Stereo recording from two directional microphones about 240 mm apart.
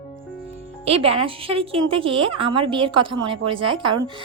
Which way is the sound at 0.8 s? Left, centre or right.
Right.